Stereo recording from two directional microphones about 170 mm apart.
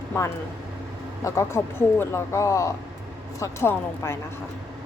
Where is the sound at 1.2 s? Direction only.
15° left (ahead or behind).